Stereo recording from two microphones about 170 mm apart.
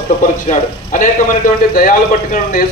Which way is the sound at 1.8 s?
55° left (ahead or behind).